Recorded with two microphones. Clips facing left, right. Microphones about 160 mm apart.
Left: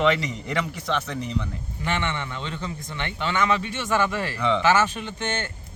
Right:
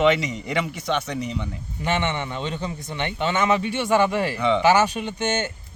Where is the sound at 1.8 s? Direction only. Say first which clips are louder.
Right 3 dB; 20° right (ahead or behind).